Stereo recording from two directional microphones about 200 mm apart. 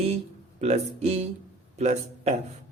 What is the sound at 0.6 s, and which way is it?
Speech, 30° right (ahead or behind).